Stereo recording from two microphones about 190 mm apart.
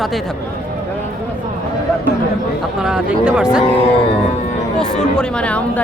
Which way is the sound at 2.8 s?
5° right (ahead or behind).